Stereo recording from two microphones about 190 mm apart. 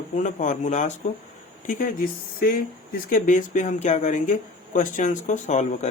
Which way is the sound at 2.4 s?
50° left (ahead or behind).